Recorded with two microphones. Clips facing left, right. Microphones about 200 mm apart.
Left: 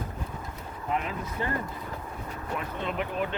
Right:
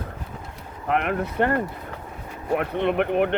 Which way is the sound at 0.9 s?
70° right (ahead or behind).